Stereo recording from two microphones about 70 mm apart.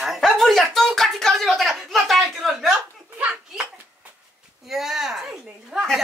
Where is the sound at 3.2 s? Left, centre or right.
Centre.